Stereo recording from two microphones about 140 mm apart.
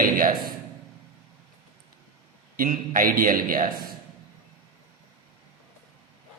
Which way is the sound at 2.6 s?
90° right.